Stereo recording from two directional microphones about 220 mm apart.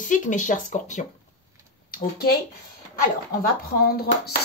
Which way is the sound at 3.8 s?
45° left (ahead or behind).